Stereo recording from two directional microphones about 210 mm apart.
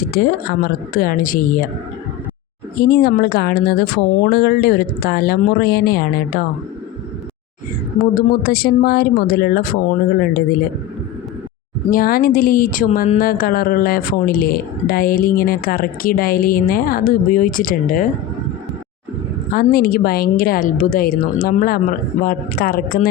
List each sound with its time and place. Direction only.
0.1 s a woman's voice: 45° left (ahead or behind)
2.8 s speech: 45° left (ahead or behind)
8.1 s speech: 45° left (ahead or behind)
11.9 s speech: 45° left (ahead or behind)
19.5 s speech: 45° left (ahead or behind)